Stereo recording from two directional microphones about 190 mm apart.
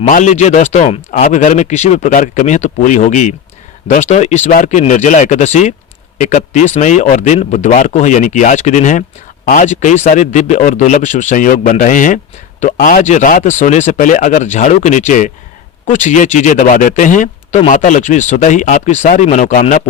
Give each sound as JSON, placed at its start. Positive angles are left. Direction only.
{"t": 0.0, "sound": "speech", "side_deg": 40}